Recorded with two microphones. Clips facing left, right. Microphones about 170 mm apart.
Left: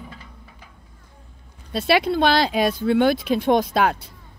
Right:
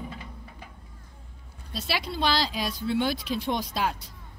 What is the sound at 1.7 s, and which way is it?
Speech, 60° left (ahead or behind).